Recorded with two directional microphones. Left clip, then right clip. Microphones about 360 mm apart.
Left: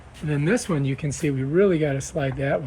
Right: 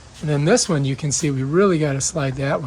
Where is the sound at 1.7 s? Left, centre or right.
Right.